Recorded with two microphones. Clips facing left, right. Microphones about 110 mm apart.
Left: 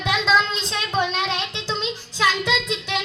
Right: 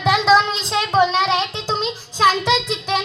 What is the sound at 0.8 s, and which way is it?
Child singing, 35° right (ahead or behind).